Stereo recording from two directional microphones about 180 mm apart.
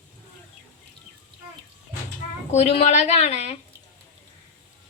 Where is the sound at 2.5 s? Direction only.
35° left (ahead or behind).